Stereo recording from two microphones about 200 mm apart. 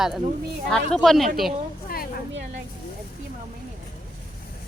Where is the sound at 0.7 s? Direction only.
5° left (ahead or behind).